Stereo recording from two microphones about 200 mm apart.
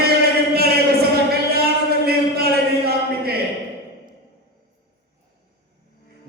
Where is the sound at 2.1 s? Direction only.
50° right (ahead or behind).